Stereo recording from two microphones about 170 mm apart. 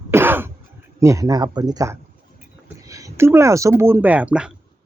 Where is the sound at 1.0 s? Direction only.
20° right (ahead or behind).